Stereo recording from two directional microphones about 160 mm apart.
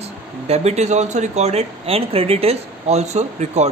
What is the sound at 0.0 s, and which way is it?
Speech, 45° right (ahead or behind).